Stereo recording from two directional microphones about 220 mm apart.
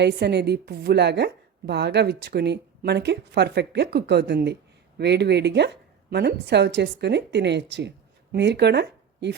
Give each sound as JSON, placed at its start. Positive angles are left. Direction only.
{"t": 0.0, "sound": "a woman's voice", "side_deg": -50}